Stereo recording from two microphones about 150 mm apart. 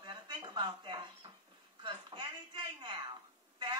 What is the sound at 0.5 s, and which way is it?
Speech, 30° right (ahead or behind).